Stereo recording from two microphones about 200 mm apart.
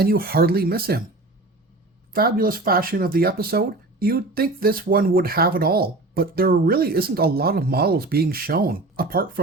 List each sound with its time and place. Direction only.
0.0 s speech: 50° right (ahead or behind)
2.1 s speech: 45° right (ahead or behind)